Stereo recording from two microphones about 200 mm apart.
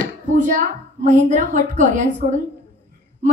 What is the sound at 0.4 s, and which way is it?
A woman's voice, 40° right (ahead or behind).